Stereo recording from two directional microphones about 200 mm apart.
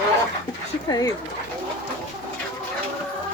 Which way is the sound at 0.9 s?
20° left (ahead or behind).